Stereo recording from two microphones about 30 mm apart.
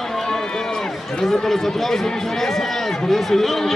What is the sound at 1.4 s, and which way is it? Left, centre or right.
Speech, centre.